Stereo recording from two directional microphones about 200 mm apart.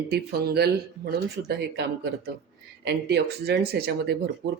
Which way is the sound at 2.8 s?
55° right (ahead or behind).